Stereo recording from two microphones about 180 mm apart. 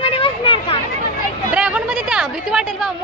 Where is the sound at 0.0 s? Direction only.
30° left (ahead or behind).